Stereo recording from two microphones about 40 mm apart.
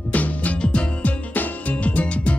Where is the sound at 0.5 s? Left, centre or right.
Left.